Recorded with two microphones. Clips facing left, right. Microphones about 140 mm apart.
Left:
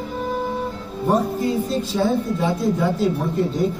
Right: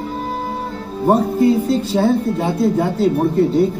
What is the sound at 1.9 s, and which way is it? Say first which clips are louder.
Speech: right 3 dB; 65° right (ahead or behind).